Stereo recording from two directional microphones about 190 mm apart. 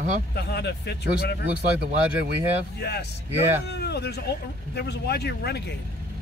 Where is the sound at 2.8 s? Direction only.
60° left (ahead or behind).